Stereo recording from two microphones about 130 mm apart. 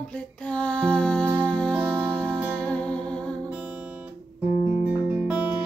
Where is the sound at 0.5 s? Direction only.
10° left (ahead or behind).